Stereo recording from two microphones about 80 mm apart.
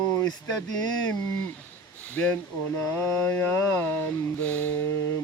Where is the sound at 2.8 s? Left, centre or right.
Left.